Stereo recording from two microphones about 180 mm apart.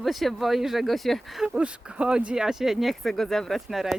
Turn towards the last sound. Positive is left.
turn(degrees=0)  # may be behind; listen again after turning